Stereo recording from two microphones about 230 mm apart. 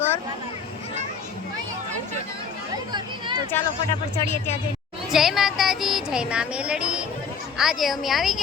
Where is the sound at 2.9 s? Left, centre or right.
Centre.